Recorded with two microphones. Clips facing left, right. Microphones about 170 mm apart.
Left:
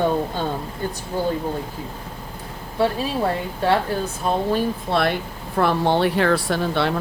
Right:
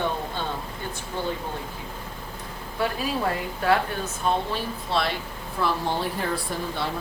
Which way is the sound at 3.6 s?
30° left (ahead or behind).